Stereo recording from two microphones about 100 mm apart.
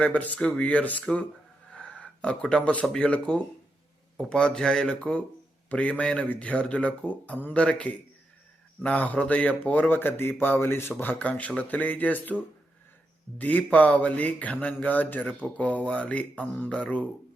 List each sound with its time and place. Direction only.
0.0 s speech: 15° left (ahead or behind)
13.4 s speech: 15° left (ahead or behind)